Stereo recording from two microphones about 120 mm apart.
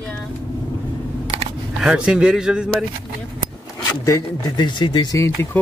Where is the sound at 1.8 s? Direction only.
5° right (ahead or behind).